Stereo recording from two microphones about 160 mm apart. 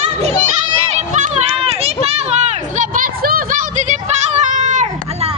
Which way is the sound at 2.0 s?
40° right (ahead or behind).